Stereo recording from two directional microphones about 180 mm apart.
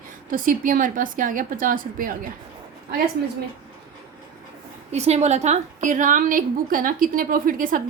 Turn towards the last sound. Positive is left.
turn(degrees=-50)  # may be behind; listen again after turning